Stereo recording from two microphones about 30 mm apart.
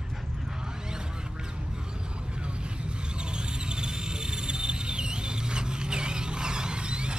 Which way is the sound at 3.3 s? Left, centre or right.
Right.